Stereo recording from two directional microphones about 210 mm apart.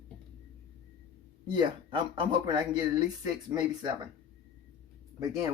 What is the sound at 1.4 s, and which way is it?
Speech, 20° right (ahead or behind).